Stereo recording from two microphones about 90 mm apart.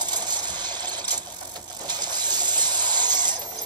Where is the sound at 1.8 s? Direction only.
55° right (ahead or behind).